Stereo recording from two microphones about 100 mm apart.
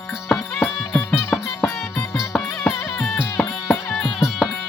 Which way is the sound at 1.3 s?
5° left (ahead or behind).